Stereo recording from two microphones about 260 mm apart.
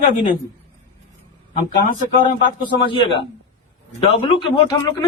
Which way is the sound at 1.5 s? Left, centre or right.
Left.